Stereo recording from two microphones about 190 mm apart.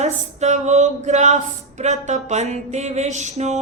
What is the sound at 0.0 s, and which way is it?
Speech, 35° right (ahead or behind).